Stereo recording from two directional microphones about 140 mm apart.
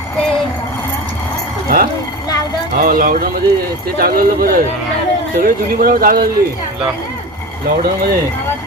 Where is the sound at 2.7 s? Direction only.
85° right.